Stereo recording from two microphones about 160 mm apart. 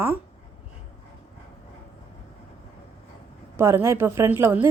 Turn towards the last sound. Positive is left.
turn(degrees=-15)  # may be behind; listen again after turning